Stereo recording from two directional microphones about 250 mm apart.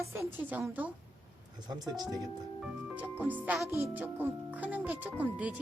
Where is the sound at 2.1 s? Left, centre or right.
Centre.